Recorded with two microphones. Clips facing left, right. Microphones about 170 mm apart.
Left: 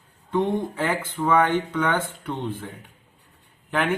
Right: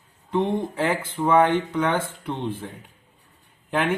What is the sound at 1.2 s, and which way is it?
Speech, 30° right (ahead or behind).